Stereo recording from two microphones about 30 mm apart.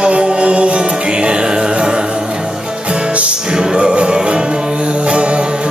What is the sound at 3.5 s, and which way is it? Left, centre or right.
Music, right.